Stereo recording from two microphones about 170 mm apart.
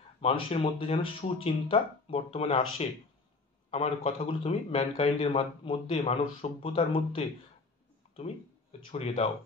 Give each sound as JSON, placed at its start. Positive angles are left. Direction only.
{"t": 0.2, "sound": "a man's voice", "side_deg": 35}
{"t": 8.9, "sound": "a man's voice", "side_deg": 35}